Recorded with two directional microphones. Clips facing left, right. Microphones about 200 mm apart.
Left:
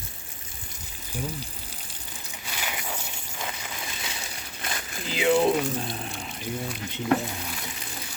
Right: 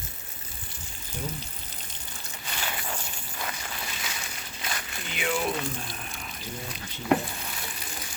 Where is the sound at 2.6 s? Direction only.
10° left (ahead or behind).